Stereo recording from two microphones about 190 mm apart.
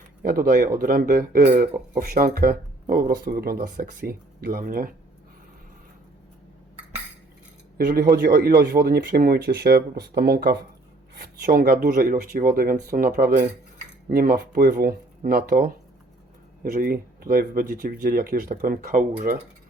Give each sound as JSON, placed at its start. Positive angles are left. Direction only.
{"t": 0.2, "sound": "speech", "side_deg": -50}
{"t": 7.9, "sound": "speech", "side_deg": -50}
{"t": 16.7, "sound": "speech", "side_deg": -50}